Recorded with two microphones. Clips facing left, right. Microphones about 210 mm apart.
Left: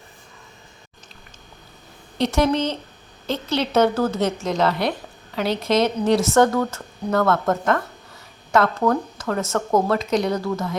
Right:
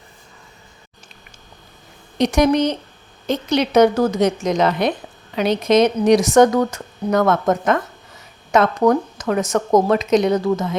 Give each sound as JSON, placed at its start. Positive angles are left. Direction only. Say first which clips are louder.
{"t": 2.1, "sound": "a woman's voice", "louder": "right 4 dB", "side_deg": -15}